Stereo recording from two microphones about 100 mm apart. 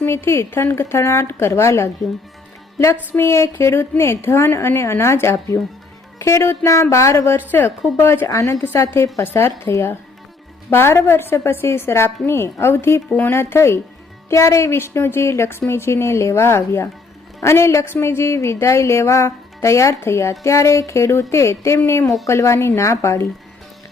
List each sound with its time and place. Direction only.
0.3 s a woman's voice: 30° left (ahead or behind)
2.7 s music: 25° left (ahead or behind)
3.2 s a woman's voice: 30° left (ahead or behind)
8.3 s a woman's voice: 30° left (ahead or behind)
22.0 s a woman's voice: centre (ahead or behind)
22.3 s a woman's voice: 30° left (ahead or behind)